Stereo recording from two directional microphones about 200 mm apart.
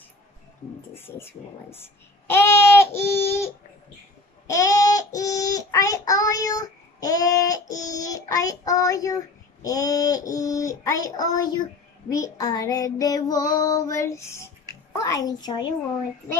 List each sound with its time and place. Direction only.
0.9 s child singing: 10° left (ahead or behind)
2.2 s a sound: 10° left (ahead or behind)
4.5 s child singing: 15° left (ahead or behind)
15.0 s a woman's voice: 15° left (ahead or behind)